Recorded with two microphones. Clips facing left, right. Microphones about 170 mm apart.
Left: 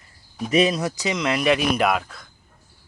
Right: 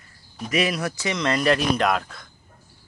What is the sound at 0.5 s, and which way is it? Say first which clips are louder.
Speech: left 4 dB; 25° left (ahead or behind).